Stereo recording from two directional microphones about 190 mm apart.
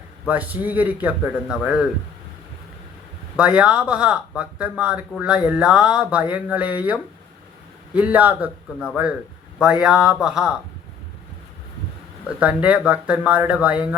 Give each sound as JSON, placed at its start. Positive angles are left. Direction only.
{"t": 0.3, "sound": "a man's voice", "side_deg": -10}
{"t": 3.3, "sound": "a man's voice", "side_deg": -5}
{"t": 12.4, "sound": "a man's voice", "side_deg": -5}